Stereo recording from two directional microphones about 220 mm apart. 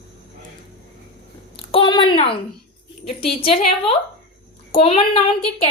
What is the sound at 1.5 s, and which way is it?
A woman's voice, 25° left (ahead or behind).